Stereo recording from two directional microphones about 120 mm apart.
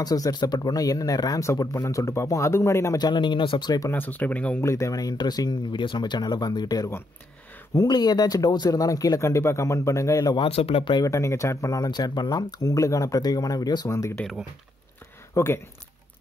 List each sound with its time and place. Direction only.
0.0 s speech: 30° left (ahead or behind)
3.0 s speech: 40° left (ahead or behind)
3.9 s speech: 15° left (ahead or behind)
4.6 s speech: 25° left (ahead or behind)
10.3 s speech: 50° left (ahead or behind)
11.1 s speech: 25° left (ahead or behind)
15.3 s speech: 20° left (ahead or behind)